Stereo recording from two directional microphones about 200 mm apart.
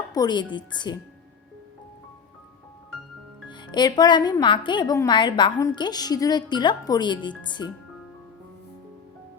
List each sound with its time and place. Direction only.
0.1 s a woman's voice: 20° left (ahead or behind)
3.5 s a woman's voice: 20° left (ahead or behind)